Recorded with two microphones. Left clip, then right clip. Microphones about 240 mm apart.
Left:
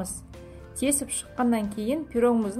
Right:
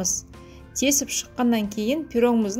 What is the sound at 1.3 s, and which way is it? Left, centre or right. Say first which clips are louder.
A woman's voice: right 1 dB; right.